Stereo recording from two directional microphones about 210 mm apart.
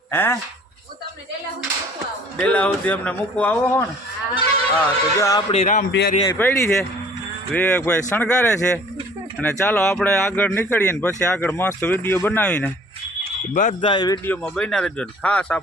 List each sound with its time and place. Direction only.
0.1 s speech: 10° left (ahead or behind)
2.4 s speech: 5° left (ahead or behind)
5.5 s a man's voice: 35° left (ahead or behind)
5.9 s a man's voice: 55° left (ahead or behind)
6.2 s speech: 10° left (ahead or behind)
13.5 s a man's voice: 40° left (ahead or behind)
13.8 s speech: 20° left (ahead or behind); by 15.6 s 5° left (ahead or behind)